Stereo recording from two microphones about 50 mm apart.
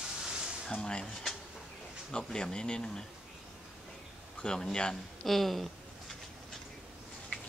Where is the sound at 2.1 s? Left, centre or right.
Centre.